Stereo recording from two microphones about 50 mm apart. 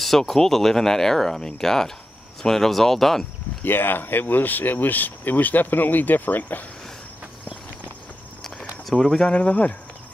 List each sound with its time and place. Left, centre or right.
0.0 s speech: centre
3.6 s speech: left
8.9 s speech: centre
9.3 s speech: left